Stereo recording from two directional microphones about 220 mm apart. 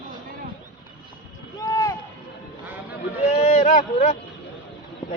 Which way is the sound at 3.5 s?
35° left (ahead or behind).